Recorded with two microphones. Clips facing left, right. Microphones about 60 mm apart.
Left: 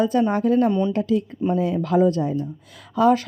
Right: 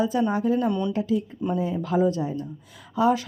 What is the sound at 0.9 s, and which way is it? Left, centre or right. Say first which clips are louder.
Speech: left 3 dB; left.